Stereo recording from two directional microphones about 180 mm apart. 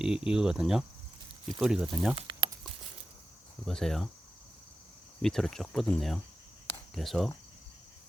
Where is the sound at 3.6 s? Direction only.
Centre (ahead or behind).